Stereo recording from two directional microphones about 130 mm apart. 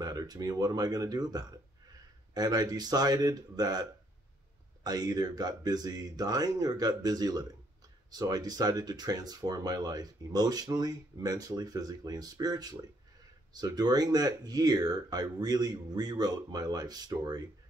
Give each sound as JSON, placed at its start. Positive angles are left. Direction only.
{"t": 0.0, "sound": "speech", "side_deg": -30}
{"t": 4.8, "sound": "speech", "side_deg": -30}